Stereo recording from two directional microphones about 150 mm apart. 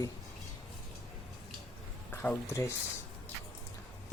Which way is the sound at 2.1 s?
15° left (ahead or behind).